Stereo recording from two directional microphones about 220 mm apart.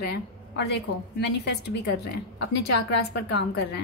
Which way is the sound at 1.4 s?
50° left (ahead or behind).